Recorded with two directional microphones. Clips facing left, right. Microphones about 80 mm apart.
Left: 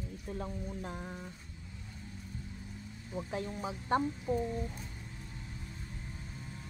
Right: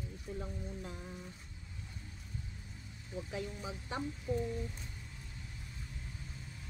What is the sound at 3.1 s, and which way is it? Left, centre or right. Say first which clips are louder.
Speech: left 3 dB; left.